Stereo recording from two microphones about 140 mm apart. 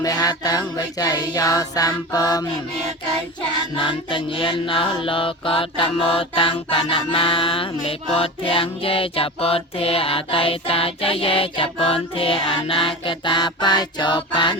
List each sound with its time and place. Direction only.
0.0 s music: 30° left (ahead or behind)
3.8 s mantra: 35° left (ahead or behind)